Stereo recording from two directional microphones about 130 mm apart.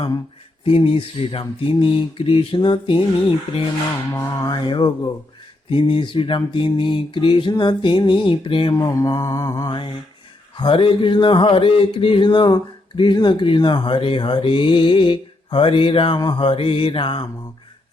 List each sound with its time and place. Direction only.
0.6 s mantra: 45° left (ahead or behind)
4.1 s speech: 30° left (ahead or behind)
8.7 s mantra: 25° left (ahead or behind)
10.6 s speech: 40° left (ahead or behind)